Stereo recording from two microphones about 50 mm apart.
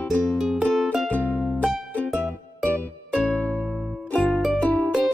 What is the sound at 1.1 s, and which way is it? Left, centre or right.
Music, left.